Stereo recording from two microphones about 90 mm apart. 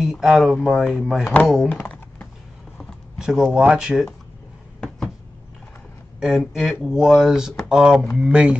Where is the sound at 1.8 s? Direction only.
20° left (ahead or behind).